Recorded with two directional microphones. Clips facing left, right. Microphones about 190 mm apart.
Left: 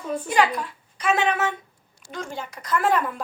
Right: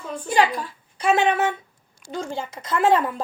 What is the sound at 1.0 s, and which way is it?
Speech, 30° right (ahead or behind).